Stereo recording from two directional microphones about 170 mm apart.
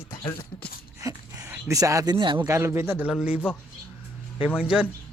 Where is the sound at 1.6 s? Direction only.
20° right (ahead or behind).